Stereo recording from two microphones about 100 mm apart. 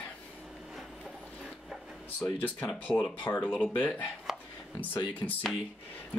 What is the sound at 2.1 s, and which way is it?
Speech, 15° left (ahead or behind).